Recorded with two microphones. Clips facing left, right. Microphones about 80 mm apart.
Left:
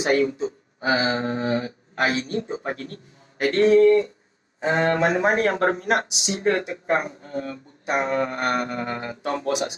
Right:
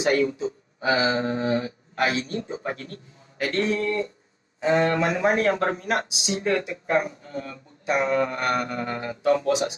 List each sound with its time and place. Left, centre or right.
0.0 s speech: left